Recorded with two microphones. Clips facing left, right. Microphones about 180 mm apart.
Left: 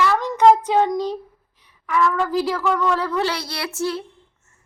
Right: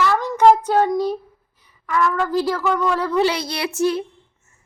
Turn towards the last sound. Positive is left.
turn(degrees=-15)  # may be behind; listen again after turning